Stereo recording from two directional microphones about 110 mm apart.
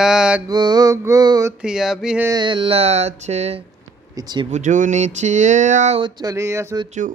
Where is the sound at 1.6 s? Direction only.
5° right (ahead or behind).